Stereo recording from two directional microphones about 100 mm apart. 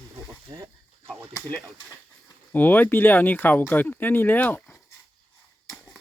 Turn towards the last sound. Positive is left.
turn(degrees=15)  # may be behind; listen again after turning